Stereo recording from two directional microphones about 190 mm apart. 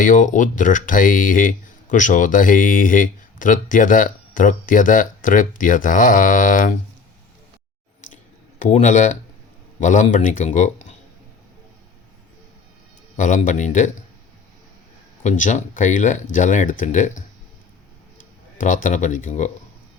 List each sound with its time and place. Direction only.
0.0 s speech: 40° left (ahead or behind)
8.1 s a sound: 40° left (ahead or behind)
9.8 s speech: 40° left (ahead or behind)
13.1 s speech: 40° left (ahead or behind)
15.2 s speech: 40° left (ahead or behind)
18.6 s speech: 45° left (ahead or behind)